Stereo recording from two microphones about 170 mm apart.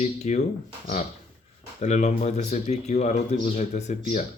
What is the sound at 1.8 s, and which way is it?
Speech, 45° left (ahead or behind).